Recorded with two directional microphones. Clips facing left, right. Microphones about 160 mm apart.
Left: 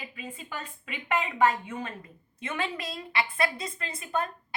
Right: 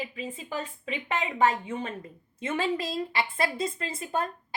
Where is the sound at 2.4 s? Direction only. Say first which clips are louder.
Right 5 dB; 30° right (ahead or behind).